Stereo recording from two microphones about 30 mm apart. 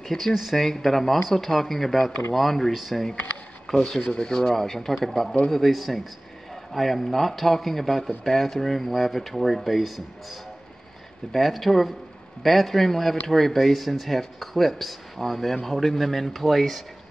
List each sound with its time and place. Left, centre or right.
0.0 s speech: centre
2.7 s speech: centre
3.7 s a man's voice: centre